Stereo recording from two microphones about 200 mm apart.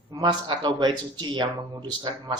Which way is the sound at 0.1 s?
20° right (ahead or behind).